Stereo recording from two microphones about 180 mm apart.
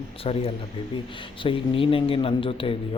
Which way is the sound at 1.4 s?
30° left (ahead or behind).